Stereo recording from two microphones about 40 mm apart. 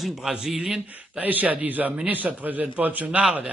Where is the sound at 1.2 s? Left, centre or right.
Right.